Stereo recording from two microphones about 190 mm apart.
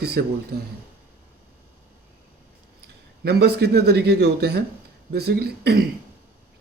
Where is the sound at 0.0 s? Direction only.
55° right (ahead or behind).